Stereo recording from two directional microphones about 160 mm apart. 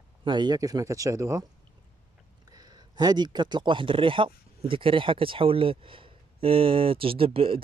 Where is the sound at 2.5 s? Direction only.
25° right (ahead or behind).